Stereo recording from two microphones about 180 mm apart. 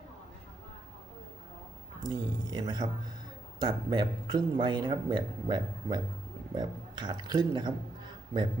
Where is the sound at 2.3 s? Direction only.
25° right (ahead or behind).